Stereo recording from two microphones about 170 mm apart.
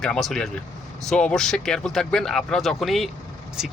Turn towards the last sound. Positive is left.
turn(degrees=-5)  # may be behind; listen again after turning